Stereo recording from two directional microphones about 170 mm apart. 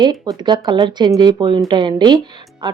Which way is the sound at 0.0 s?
25° right (ahead or behind).